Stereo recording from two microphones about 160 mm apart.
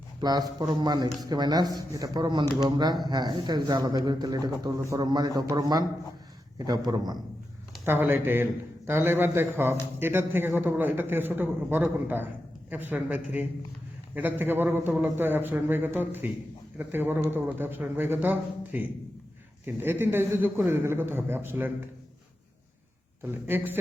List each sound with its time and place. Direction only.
0.2 s a man's voice: 25° right (ahead or behind)
7.9 s a man's voice: 15° right (ahead or behind)
23.2 s a man's voice: 15° right (ahead or behind)